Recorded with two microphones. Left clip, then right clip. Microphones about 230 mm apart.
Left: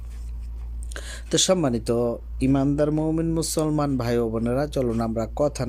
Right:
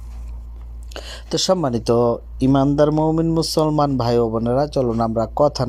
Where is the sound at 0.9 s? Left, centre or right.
Centre.